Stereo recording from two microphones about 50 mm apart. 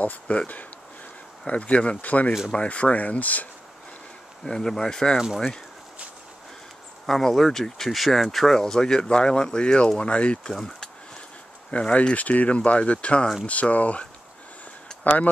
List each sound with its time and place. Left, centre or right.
0.0 s speech: left
1.5 s speech: left
4.5 s speech: centre
7.1 s speech: centre
11.7 s speech: left